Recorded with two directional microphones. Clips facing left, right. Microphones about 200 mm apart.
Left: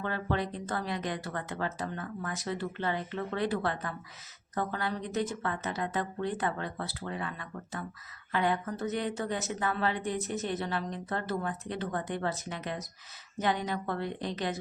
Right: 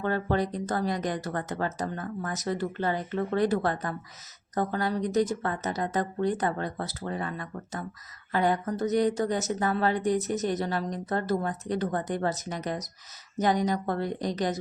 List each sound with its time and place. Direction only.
0.0 s a woman's voice: 45° right (ahead or behind)